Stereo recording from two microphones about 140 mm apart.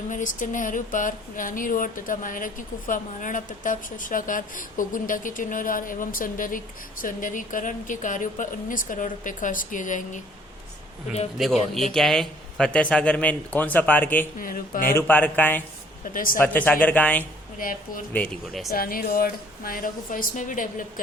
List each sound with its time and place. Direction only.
0.1 s speech: 65° left (ahead or behind)
11.4 s speech: centre (ahead or behind)
14.3 s speech: 80° left
14.9 s speech: 15° left (ahead or behind)
16.1 s speech: 85° left
16.4 s speech: 10° left (ahead or behind)
17.6 s speech: 75° left (ahead or behind)
18.7 s speech: 90° left; by 21.0 s 70° left (ahead or behind)